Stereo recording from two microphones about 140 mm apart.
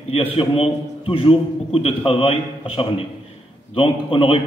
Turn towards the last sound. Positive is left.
turn(degrees=40)  # may be behind; listen again after turning